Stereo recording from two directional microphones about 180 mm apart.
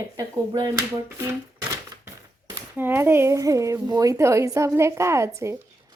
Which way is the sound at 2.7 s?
10° right (ahead or behind).